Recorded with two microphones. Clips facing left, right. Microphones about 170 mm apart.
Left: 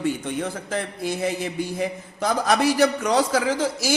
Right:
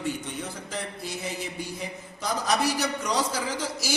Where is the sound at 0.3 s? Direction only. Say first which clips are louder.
Left 7 dB; 55° left (ahead or behind).